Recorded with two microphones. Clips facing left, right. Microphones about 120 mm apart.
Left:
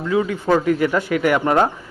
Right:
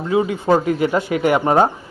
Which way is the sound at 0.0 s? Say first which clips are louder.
Right 1 dB; 25° right (ahead or behind).